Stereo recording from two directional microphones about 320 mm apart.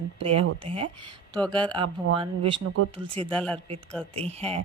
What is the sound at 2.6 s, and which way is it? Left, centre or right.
Speech, right.